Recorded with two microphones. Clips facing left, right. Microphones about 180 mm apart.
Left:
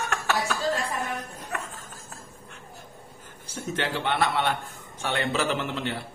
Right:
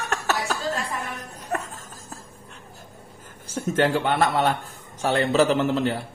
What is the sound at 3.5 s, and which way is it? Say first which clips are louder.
A man's voice: right 8 dB; 45° right (ahead or behind).